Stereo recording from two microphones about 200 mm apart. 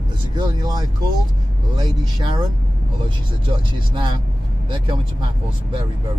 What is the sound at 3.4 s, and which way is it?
Speech, 25° right (ahead or behind).